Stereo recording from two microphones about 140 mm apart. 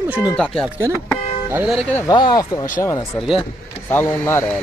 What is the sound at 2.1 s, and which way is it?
Speech, 30° left (ahead or behind).